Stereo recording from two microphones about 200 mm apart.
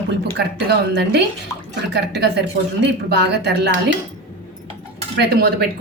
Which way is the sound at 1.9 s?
55° right (ahead or behind).